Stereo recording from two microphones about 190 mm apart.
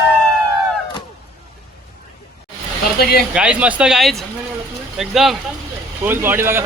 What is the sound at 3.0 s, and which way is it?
Speech, 55° left (ahead or behind).